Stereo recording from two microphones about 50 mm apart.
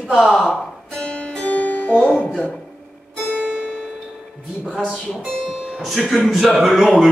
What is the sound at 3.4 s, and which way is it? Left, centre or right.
Music, centre.